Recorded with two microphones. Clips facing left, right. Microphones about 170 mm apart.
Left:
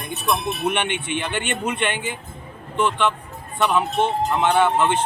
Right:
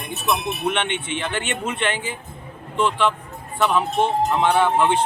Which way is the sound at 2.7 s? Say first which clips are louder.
Even; centre (ahead or behind).